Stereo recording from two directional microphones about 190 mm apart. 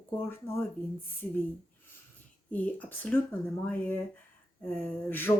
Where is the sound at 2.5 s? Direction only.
10° left (ahead or behind).